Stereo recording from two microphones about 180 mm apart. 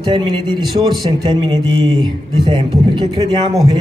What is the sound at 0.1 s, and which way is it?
Speech, 25° right (ahead or behind).